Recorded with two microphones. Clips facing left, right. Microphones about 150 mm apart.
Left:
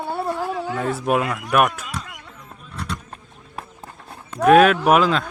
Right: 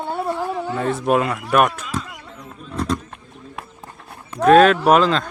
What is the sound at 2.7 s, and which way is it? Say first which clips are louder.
Speech: right 8 dB; 35° right (ahead or behind).